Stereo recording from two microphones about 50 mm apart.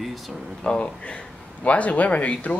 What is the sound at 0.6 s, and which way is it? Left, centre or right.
Speech, left.